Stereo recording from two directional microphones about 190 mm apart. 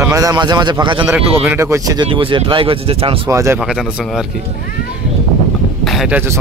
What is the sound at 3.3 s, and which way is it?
Speech, 15° right (ahead or behind).